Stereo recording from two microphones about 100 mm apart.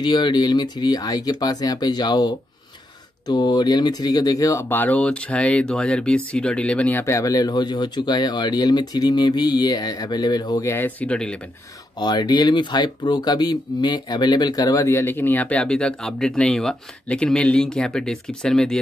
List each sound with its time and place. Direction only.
0.0 s speech: 50° left (ahead or behind)
4.6 s speech: 15° left (ahead or behind)
7.1 s speech: 35° left (ahead or behind)
10.7 s speech: 20° left (ahead or behind)
12.0 s speech: 45° left (ahead or behind); by 18.8 s 5° left (ahead or behind)